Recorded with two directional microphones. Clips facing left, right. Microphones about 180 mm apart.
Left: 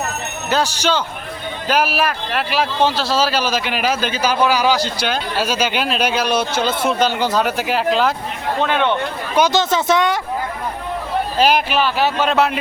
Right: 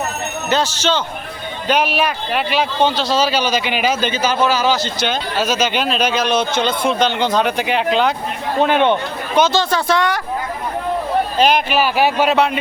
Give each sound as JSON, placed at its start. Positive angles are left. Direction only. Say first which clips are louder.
{"t": 0.5, "sound": "speech", "louder": "even", "side_deg": 10}
{"t": 8.5, "sound": "speech", "louder": "right 4 dB", "side_deg": -15}
{"t": 9.4, "sound": "speech", "louder": "even", "side_deg": 20}
{"t": 11.3, "sound": "speech", "louder": "left 1 dB", "side_deg": 5}
{"t": 11.8, "sound": "speech", "louder": "right 2 dB", "side_deg": -10}